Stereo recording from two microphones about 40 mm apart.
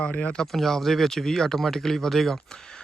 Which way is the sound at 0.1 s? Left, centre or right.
Left.